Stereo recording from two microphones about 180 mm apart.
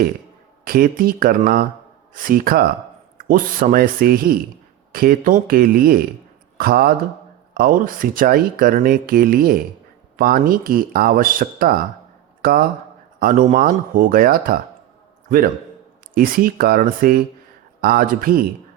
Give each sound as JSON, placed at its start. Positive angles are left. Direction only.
{"t": 0.6, "sound": "speech", "side_deg": -55}
{"t": 16.1, "sound": "speech", "side_deg": -50}